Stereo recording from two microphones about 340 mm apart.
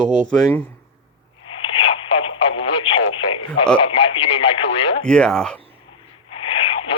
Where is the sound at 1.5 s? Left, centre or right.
Centre.